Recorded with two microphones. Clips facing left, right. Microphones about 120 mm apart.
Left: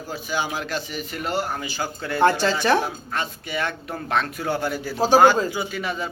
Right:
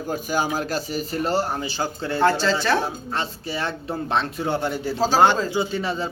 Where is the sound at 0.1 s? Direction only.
45° right (ahead or behind).